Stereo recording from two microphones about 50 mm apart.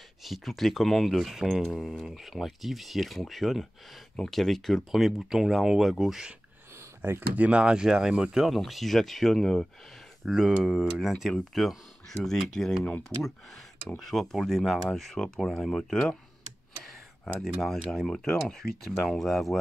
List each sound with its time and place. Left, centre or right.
0.2 s speech: centre
4.9 s speech: centre
7.0 s speech: right
7.3 s speech: right
8.5 s speech: centre
10.2 s speech: centre
13.9 s speech: centre
17.4 s speech: centre